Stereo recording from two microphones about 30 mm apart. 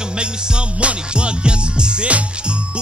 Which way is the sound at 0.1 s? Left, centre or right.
Right.